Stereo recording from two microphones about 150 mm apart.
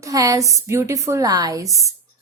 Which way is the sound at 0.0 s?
25° right (ahead or behind).